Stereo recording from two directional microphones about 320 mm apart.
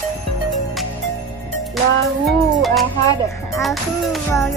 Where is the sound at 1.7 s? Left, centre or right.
Centre.